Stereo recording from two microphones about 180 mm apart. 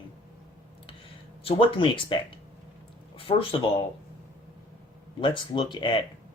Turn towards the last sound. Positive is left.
turn(degrees=25)  # may be behind; listen again after turning